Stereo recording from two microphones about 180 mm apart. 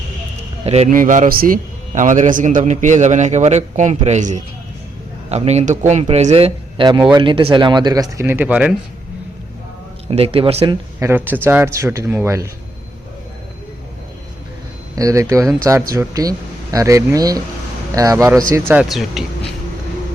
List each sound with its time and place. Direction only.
0.6 s a man's voice: 35° right (ahead or behind)
0.9 s a man's voice: 50° right (ahead or behind); by 8.7 s 10° right (ahead or behind)
10.1 s speech: 30° right (ahead or behind)
11.0 s speech: 10° right (ahead or behind)
14.9 s speech: 20° right (ahead or behind)
18.7 s speech: 5° right (ahead or behind)